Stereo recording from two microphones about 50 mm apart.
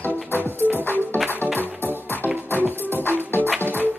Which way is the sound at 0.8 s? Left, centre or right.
Left.